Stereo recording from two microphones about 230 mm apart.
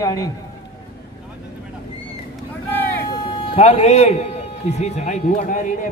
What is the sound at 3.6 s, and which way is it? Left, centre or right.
A man's voice, left.